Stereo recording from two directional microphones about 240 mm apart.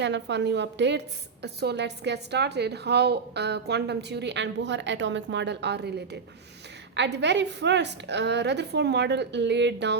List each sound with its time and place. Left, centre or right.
0.0 s a woman's voice: right